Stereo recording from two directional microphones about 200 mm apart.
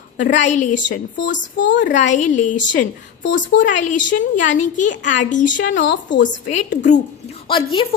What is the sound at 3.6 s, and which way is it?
A woman's voice, 40° left (ahead or behind).